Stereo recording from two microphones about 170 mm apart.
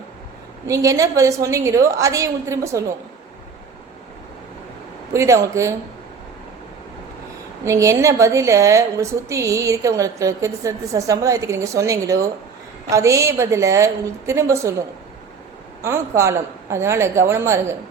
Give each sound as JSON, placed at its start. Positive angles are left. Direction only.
{"t": 0.7, "sound": "a woman's voice", "side_deg": -20}
{"t": 5.1, "sound": "a woman's voice", "side_deg": -20}
{"t": 7.6, "sound": "a woman's voice", "side_deg": -20}
{"t": 15.8, "sound": "a woman's voice", "side_deg": -15}